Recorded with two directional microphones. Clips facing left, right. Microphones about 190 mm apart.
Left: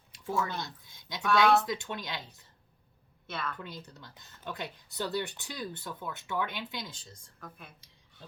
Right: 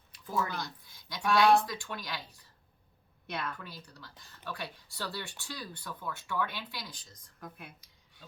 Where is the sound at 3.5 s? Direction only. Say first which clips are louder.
Left 4 dB; 20° left (ahead or behind).